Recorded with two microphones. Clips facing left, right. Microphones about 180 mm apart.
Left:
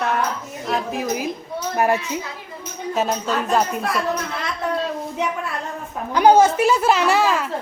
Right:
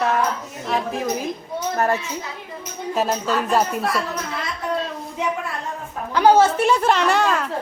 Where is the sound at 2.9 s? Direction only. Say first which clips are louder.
Even; centre (ahead or behind).